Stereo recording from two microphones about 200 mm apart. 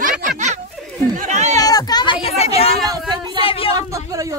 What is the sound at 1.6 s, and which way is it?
Speech, 20° left (ahead or behind).